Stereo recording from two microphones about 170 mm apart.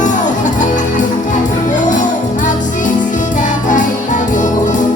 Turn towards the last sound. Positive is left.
turn(degrees=45)  # may be behind; listen again after turning